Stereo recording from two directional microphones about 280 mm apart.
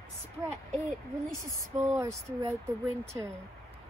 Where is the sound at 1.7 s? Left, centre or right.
Centre.